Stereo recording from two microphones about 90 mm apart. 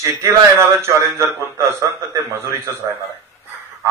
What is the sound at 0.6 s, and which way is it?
Speech, 35° right (ahead or behind).